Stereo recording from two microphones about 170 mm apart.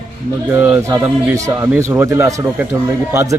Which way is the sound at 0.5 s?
10° right (ahead or behind).